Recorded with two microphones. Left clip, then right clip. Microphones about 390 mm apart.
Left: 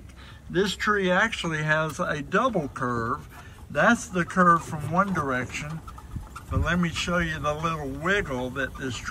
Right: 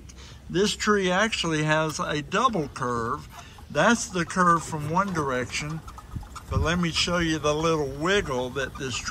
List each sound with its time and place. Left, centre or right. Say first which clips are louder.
0.5 s speech: right 1 dB; centre